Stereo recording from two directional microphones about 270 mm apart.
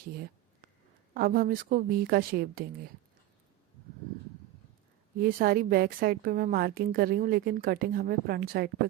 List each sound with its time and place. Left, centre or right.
1.1 s a woman's voice: right
5.1 s a woman's voice: right